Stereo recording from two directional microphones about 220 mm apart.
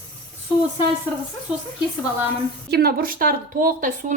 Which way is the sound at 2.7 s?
45° right (ahead or behind).